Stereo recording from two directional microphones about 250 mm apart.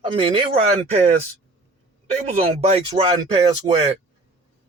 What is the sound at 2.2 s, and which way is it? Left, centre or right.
Speech, right.